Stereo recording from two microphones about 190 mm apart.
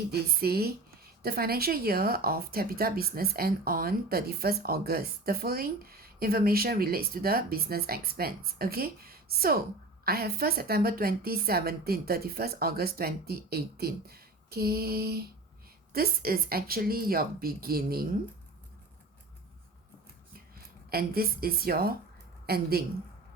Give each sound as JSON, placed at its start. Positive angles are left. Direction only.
{"t": 0.1, "sound": "a woman's voice", "side_deg": -55}
{"t": 20.9, "sound": "a woman's voice", "side_deg": -55}